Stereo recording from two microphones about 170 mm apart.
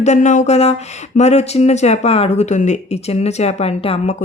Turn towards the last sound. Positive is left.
turn(degrees=35)  # may be behind; listen again after turning